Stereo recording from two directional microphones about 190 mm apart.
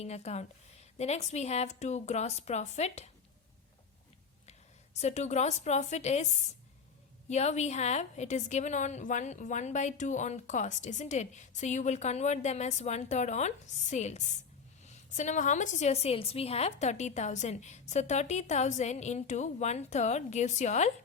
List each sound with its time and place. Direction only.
0.0 s a woman's voice: 35° left (ahead or behind)
4.9 s a woman's voice: 35° left (ahead or behind)
7.3 s a woman's voice: 35° left (ahead or behind)